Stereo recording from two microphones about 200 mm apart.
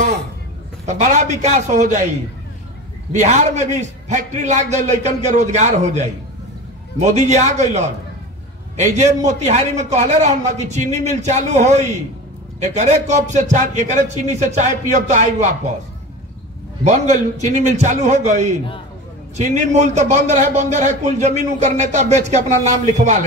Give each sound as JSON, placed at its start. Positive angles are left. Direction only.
{"t": 0.8, "sound": "a man's voice", "side_deg": -35}
{"t": 3.1, "sound": "a man's voice", "side_deg": -35}
{"t": 16.8, "sound": "a man's voice", "side_deg": -35}